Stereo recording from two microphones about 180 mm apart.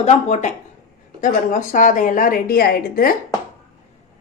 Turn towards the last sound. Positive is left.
turn(degrees=55)  # may be behind; listen again after turning